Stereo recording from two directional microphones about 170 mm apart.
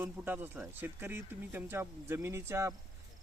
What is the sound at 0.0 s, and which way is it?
Speech, 10° right (ahead or behind).